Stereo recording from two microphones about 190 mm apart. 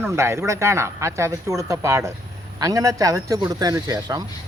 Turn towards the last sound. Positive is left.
turn(degrees=-20)  # may be behind; listen again after turning